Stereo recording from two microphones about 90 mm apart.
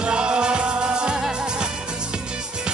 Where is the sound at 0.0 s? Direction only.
10° right (ahead or behind).